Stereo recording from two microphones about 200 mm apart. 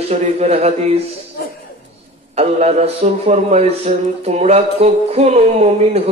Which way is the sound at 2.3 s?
30° right (ahead or behind).